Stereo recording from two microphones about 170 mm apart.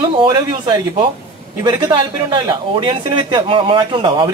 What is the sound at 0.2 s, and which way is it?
Speech, 25° right (ahead or behind).